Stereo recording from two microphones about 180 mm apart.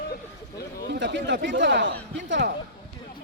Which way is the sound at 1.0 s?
75° right (ahead or behind).